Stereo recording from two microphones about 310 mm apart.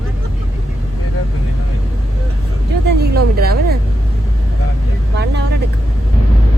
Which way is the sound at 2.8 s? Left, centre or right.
Right.